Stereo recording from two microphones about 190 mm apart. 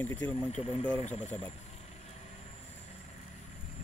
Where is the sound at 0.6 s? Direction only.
35° left (ahead or behind).